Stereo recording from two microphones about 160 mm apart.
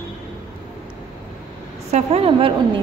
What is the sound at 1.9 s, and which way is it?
Speech, 40° right (ahead or behind).